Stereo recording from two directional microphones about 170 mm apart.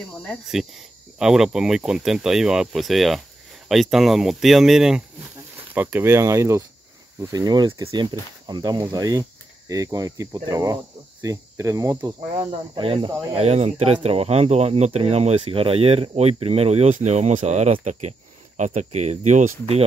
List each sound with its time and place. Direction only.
0.2 s speech: centre (ahead or behind); by 12.2 s 20° right (ahead or behind)
12.7 s speech: 30° right (ahead or behind)